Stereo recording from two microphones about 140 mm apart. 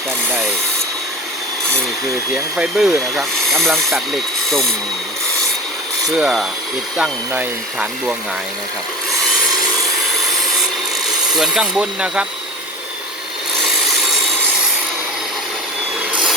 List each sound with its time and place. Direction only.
2.3 s speech: 5° right (ahead or behind)
6.1 s speech: 5° right (ahead or behind)
11.3 s speech: 5° right (ahead or behind)